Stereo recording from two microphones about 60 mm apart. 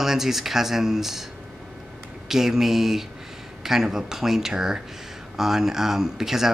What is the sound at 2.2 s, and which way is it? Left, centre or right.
Speech, centre.